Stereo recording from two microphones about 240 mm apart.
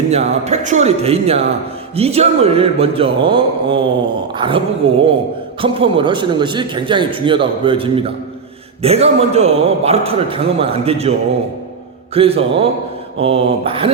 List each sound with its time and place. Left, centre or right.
0.1 s speech: right
12.1 s speech: right